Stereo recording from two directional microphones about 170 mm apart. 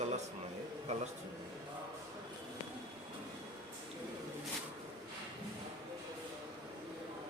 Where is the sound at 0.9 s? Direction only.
40° right (ahead or behind).